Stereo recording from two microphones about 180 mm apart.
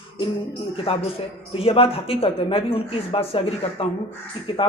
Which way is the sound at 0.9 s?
30° left (ahead or behind).